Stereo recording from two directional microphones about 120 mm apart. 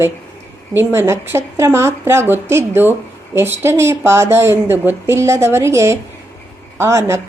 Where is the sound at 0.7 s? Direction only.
20° right (ahead or behind).